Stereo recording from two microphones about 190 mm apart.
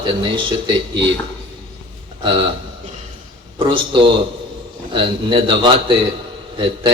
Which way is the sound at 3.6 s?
25° right (ahead or behind).